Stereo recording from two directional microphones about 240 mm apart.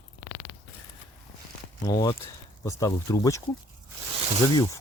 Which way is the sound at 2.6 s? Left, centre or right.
Centre.